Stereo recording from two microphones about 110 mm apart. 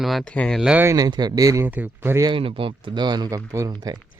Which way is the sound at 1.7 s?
15° right (ahead or behind).